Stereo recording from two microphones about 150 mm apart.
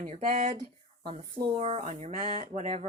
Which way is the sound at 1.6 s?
45° right (ahead or behind).